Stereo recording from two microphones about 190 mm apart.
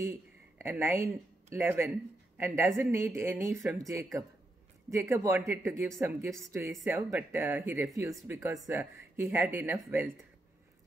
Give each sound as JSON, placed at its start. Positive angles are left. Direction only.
{"t": 0.6, "sound": "a woman's voice", "side_deg": -15}